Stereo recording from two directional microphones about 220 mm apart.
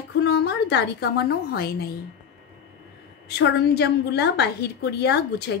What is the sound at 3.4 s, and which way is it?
A woman's voice, 50° left (ahead or behind).